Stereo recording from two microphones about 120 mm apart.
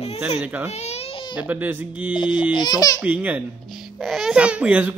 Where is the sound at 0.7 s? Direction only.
60° left (ahead or behind).